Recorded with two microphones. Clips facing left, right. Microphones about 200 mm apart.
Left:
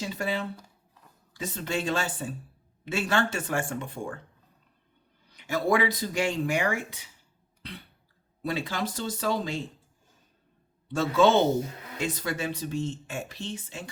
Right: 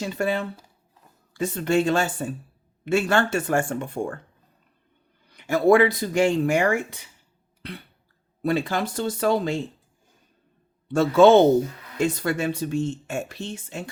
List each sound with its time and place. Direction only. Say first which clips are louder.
0.0 s speech: right 5 dB; 55° right (ahead or behind)
5.3 s speech: right 8 dB; 55° right (ahead or behind)
8.4 s speech: right 7 dB; 55° right (ahead or behind)
10.9 s speech: right 7 dB; 55° right (ahead or behind)